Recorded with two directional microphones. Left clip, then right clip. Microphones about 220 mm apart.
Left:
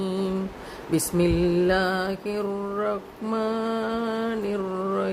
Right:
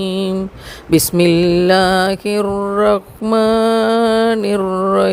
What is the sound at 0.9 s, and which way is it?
Music, 40° right (ahead or behind).